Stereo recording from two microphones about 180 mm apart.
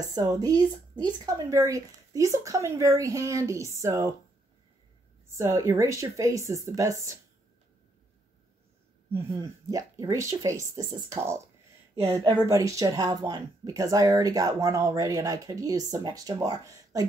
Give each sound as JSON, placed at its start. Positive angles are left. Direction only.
{"t": 0.1, "sound": "speech", "side_deg": -20}
{"t": 5.3, "sound": "speech", "side_deg": -15}
{"t": 9.1, "sound": "a woman's voice", "side_deg": -20}